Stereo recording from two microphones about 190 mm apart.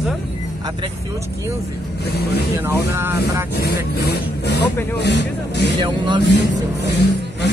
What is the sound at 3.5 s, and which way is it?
Speech, 55° left (ahead or behind).